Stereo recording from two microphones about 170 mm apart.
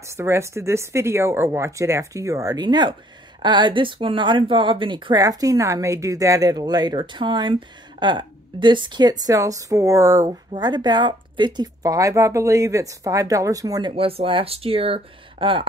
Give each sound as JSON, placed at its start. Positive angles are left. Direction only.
{"t": 0.2, "sound": "speech", "side_deg": -15}